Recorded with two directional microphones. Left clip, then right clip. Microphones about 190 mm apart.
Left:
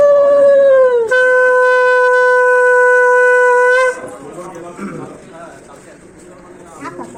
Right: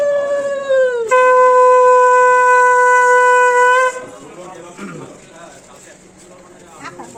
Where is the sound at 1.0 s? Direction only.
30° right (ahead or behind).